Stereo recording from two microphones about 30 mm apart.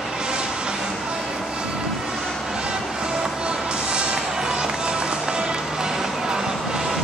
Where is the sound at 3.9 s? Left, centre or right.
Right.